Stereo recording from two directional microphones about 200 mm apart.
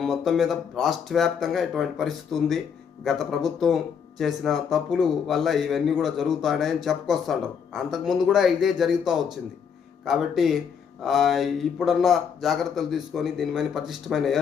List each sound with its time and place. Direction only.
0.0 s speech: centre (ahead or behind)